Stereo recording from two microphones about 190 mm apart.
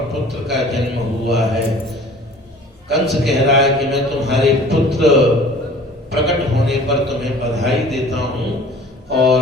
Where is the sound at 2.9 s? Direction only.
Centre (ahead or behind).